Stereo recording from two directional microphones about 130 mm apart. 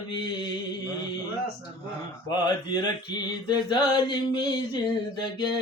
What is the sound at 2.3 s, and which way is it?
Mantra, 35° left (ahead or behind).